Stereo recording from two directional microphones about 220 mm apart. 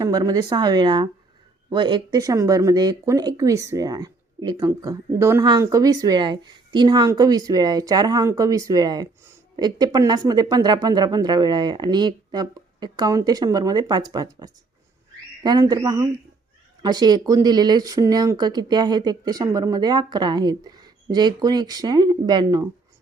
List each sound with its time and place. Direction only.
0.0 s speech: 15° right (ahead or behind)